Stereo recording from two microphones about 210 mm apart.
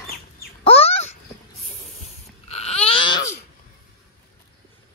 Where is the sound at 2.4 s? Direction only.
30° left (ahead or behind).